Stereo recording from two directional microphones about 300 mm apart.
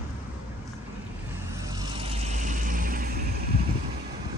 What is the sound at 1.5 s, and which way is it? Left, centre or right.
Vehicle, centre.